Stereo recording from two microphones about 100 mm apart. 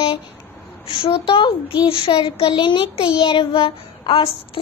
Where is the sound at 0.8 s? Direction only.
55° left (ahead or behind).